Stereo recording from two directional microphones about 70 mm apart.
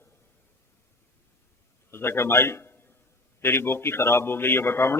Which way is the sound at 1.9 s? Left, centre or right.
Left.